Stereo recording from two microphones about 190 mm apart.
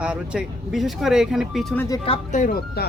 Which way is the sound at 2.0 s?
35° left (ahead or behind).